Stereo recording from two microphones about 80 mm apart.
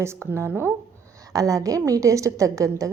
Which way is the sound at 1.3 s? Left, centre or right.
Right.